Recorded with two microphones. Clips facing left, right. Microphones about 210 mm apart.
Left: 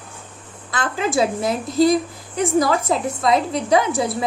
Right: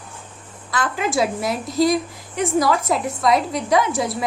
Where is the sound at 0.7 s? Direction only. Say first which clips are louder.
Even; 30° left (ahead or behind).